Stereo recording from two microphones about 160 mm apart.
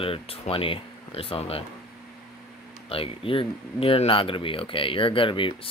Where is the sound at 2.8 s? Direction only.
35° left (ahead or behind).